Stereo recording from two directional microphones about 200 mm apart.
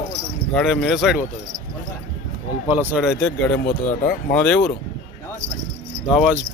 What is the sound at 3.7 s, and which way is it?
Speech, 45° left (ahead or behind).